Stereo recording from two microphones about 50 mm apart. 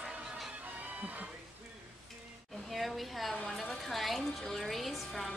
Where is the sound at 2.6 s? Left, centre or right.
Centre.